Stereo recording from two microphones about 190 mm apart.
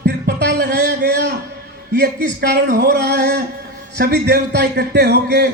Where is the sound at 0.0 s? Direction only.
55° right (ahead or behind).